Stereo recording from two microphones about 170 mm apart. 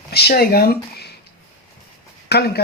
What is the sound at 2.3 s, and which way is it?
Speech, 70° left (ahead or behind).